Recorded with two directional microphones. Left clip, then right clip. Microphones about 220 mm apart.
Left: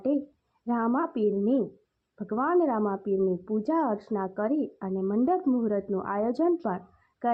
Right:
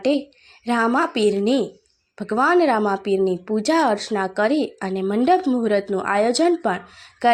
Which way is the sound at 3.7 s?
35° right (ahead or behind).